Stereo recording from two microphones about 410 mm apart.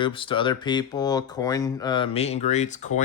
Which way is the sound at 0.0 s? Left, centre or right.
Centre.